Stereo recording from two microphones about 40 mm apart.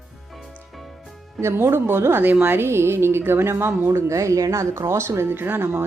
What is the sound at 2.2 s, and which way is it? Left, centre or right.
Speech, right.